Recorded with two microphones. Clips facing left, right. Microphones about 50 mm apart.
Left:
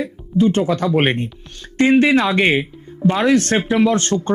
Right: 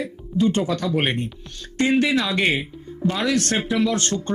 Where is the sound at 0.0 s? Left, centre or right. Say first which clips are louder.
Left 4 dB; left.